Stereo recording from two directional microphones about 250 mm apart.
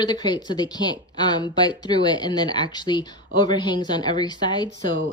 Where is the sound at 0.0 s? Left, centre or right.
Centre.